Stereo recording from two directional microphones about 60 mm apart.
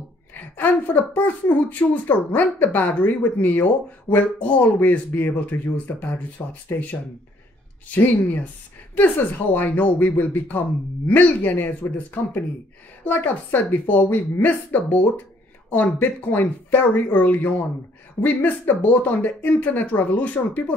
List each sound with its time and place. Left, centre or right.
0.3 s a woman's voice: left